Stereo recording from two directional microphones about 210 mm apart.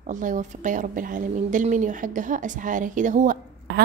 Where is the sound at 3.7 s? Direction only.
55° right (ahead or behind).